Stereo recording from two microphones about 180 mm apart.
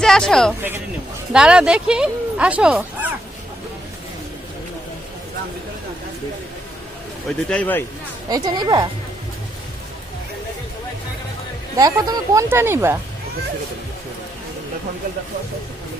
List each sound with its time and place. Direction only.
0.0 s speech: 5° left (ahead or behind)
7.4 s speech: 5° left (ahead or behind)
8.3 s a woman's voice: 20° right (ahead or behind)
11.8 s speech: 20° right (ahead or behind)